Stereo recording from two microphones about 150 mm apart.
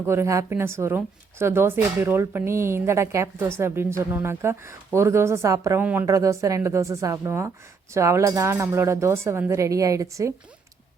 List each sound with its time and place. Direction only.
0.0 s speech: 15° right (ahead or behind)